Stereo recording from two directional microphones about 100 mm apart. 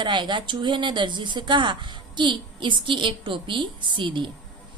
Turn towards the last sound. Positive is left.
turn(degrees=-55)  # may be behind; listen again after turning